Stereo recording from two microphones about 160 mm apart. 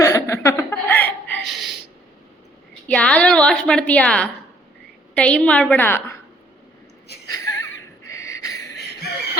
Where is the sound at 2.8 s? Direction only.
10° left (ahead or behind).